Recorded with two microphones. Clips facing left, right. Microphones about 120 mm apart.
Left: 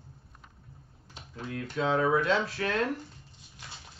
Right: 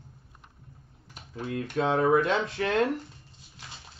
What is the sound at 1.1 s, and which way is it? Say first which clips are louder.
Speech: right 5 dB; 15° right (ahead or behind).